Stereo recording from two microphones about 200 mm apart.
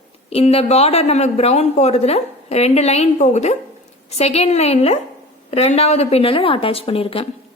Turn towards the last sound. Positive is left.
turn(degrees=30)  # may be behind; listen again after turning